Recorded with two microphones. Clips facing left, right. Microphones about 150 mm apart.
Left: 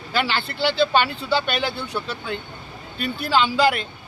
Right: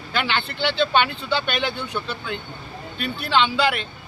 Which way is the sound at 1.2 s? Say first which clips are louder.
Left 2 dB; 40° left (ahead or behind).